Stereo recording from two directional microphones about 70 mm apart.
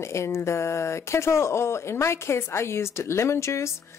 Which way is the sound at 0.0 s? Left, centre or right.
Left.